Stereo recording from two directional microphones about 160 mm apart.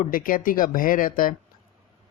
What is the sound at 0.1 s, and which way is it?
Speech, 60° left (ahead or behind).